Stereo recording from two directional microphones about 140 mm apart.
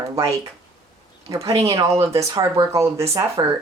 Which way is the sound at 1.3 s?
20° right (ahead or behind).